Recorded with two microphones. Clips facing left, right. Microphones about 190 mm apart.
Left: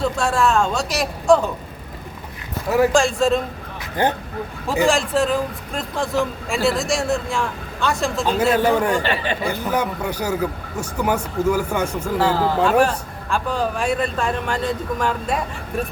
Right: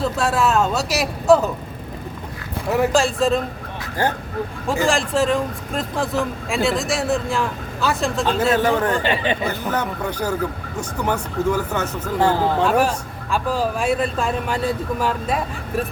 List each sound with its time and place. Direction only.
0.0 s speech: 5° right (ahead or behind)
2.9 s speech: centre (ahead or behind)
4.0 s speech: 20° left (ahead or behind)
4.9 s speech: centre (ahead or behind)
8.5 s speech: 10° left (ahead or behind)
9.0 s speech: 20° right (ahead or behind)
9.5 s speech: 10° left (ahead or behind)
12.6 s speech: 5° right (ahead or behind)